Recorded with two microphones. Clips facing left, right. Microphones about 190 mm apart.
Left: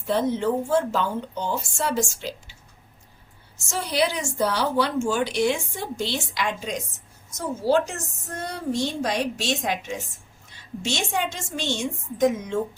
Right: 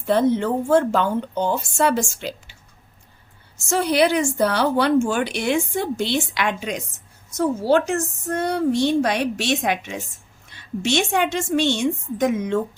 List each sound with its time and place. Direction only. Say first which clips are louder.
0.0 s speech: right 4 dB; 60° right (ahead or behind)
3.7 s speech: right 6 dB; 60° right (ahead or behind)